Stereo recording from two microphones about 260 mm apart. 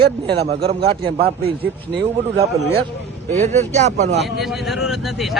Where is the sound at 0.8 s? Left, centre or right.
Right.